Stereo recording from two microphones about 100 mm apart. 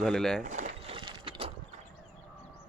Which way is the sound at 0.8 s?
60° right (ahead or behind).